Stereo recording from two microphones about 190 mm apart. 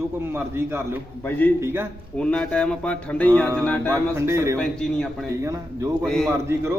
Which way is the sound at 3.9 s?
15° right (ahead or behind).